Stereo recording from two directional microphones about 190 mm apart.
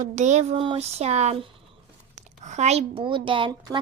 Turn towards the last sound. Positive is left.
turn(degrees=-25)  # may be behind; listen again after turning